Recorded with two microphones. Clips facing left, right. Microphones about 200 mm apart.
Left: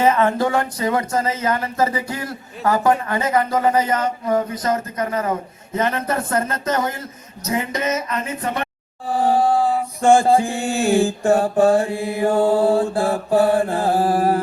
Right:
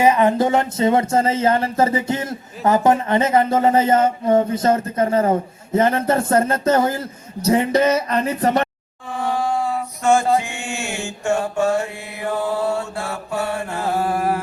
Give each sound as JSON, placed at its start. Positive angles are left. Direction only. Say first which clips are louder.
{"t": 0.0, "sound": "speech", "louder": "right 2 dB", "side_deg": -15}
{"t": 9.0, "sound": "chant", "louder": "left 5 dB", "side_deg": 35}